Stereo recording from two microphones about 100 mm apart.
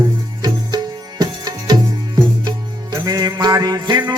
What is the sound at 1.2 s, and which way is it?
Tabla, 40° right (ahead or behind).